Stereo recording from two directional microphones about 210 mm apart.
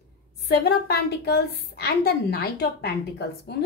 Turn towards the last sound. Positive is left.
turn(degrees=50)  # may be behind; listen again after turning